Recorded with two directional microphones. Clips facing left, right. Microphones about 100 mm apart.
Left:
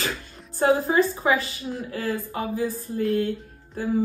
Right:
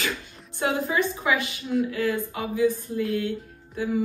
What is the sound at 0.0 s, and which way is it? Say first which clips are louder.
Speech: even; 40° left (ahead or behind).